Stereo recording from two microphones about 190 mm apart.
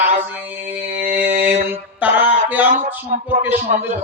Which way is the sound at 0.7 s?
45° right (ahead or behind).